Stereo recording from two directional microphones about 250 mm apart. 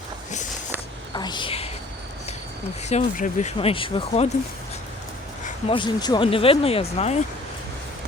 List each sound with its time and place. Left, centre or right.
1.1 s a sound: centre
2.9 s speech: left
5.6 s speech: centre